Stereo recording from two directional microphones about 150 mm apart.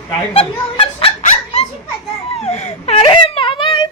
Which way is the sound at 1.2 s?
50° left (ahead or behind).